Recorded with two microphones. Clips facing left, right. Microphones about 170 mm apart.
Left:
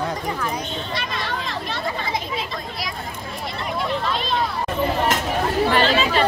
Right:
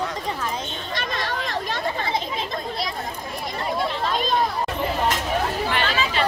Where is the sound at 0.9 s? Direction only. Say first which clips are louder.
Right 2 dB; 45° right (ahead or behind).